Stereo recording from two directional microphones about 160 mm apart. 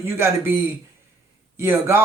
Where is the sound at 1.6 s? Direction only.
15° right (ahead or behind).